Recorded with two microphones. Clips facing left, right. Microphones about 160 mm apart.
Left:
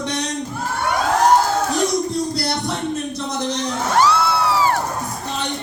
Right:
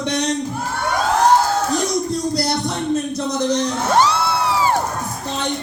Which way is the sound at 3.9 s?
20° right (ahead or behind).